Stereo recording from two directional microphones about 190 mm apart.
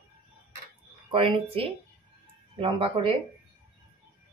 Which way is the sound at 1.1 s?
30° right (ahead or behind).